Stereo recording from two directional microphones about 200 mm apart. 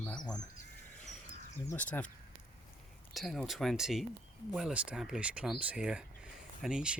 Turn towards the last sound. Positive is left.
turn(degrees=-5)  # may be behind; listen again after turning